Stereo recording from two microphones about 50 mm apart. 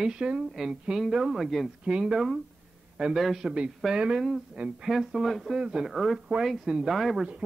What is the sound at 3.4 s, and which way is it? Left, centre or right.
Speech, right.